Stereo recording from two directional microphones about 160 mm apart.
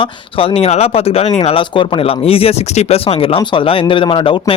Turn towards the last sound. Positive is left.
turn(degrees=35)  # may be behind; listen again after turning